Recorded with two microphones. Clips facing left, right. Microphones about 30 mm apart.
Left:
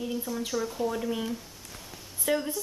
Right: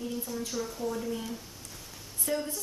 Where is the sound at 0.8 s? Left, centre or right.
Left.